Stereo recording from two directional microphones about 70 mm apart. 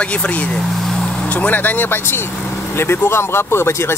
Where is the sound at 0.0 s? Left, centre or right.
Centre.